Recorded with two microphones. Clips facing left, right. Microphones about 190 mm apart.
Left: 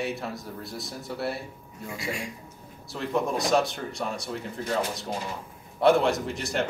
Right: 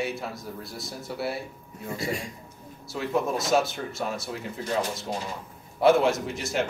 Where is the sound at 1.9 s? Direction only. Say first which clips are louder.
Right 3 dB; 35° right (ahead or behind).